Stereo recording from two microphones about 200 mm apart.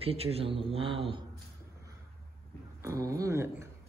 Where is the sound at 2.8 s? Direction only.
15° right (ahead or behind).